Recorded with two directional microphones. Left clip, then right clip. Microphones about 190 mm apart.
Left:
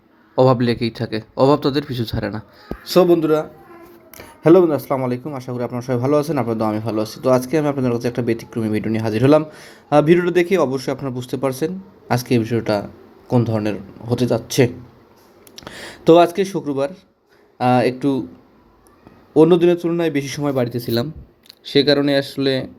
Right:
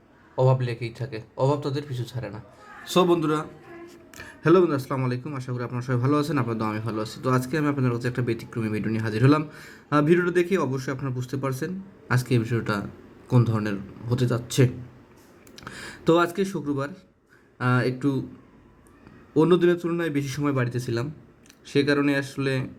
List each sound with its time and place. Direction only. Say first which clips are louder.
0.3 s speech: left 9 dB; 35° left (ahead or behind)
2.8 s a man's voice: left 7 dB; 10° left (ahead or behind)
19.3 s speech: left 7 dB; centre (ahead or behind)
20.6 s speech: left 8 dB; 20° left (ahead or behind)